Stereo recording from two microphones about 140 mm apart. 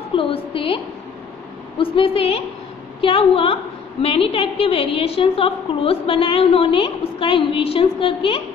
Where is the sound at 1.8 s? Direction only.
40° left (ahead or behind).